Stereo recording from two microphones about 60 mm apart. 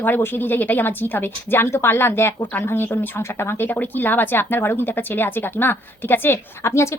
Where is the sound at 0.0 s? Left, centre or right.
Left.